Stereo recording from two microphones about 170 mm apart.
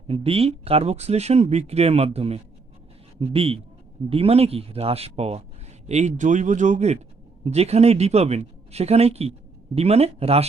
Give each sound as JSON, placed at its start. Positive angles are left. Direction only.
{"t": 0.1, "sound": "speech", "side_deg": -35}